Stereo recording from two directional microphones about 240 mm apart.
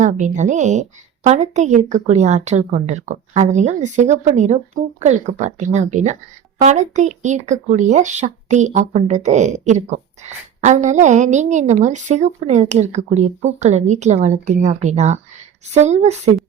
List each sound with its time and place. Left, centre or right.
0.0 s a woman's voice: right